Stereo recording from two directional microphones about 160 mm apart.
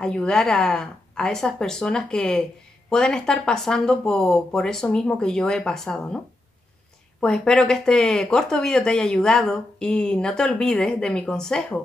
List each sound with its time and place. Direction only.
0.0 s speech: 5° left (ahead or behind)